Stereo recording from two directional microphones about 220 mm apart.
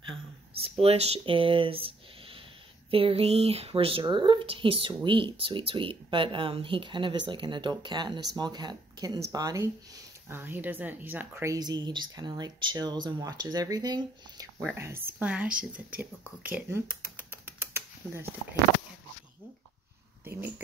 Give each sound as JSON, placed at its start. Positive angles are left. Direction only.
{"t": 0.1, "sound": "speech", "side_deg": -25}
{"t": 20.2, "sound": "speech", "side_deg": -10}